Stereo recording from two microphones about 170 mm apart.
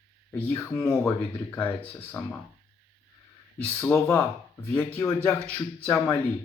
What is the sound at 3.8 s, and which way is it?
Speech, 15° left (ahead or behind).